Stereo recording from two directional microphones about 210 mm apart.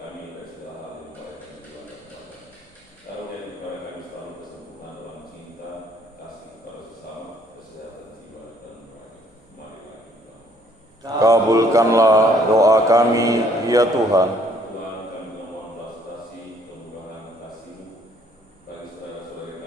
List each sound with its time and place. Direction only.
11.0 s speech: 15° right (ahead or behind)